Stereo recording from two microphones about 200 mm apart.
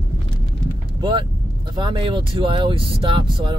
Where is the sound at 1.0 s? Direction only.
25° right (ahead or behind).